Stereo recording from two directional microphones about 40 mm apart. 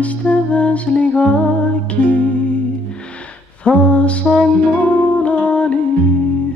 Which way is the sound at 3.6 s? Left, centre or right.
Left.